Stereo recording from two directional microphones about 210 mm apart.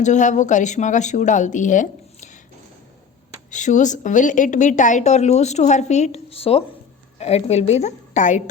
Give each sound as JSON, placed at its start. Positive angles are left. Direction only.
{"t": 0.0, "sound": "a woman's voice", "side_deg": 35}
{"t": 3.5, "sound": "a woman's voice", "side_deg": 35}